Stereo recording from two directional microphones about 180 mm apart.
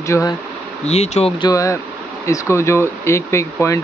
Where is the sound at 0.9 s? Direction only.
35° left (ahead or behind).